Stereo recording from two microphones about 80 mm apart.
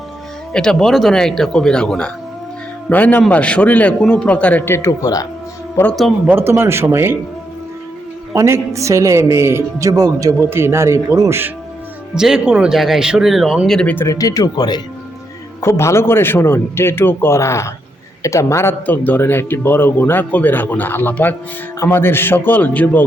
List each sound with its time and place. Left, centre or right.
0.5 s a man's voice: centre
2.9 s a man's voice: left
4.7 s a man's voice: left
6.3 s speech: right
8.3 s speech: right
10.5 s speech: right
12.1 s speech: centre
14.1 s speech: left
15.6 s a man's voice: left
18.9 s speech: left